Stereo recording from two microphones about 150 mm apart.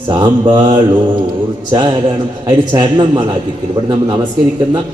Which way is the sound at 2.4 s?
30° right (ahead or behind).